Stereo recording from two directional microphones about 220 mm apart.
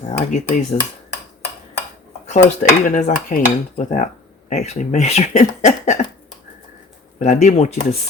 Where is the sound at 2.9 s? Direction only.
35° left (ahead or behind).